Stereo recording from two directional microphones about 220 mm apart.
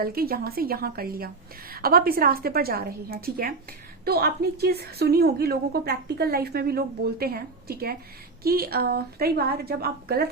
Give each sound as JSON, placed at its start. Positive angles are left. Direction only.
{"t": 0.0, "sound": "a woman's voice", "side_deg": -45}